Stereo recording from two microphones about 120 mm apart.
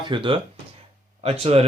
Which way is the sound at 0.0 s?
40° right (ahead or behind).